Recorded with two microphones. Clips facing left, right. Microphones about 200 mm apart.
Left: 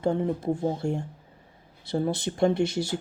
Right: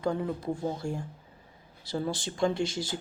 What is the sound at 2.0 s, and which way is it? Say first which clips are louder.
Speech: left 5 dB; 60° left (ahead or behind).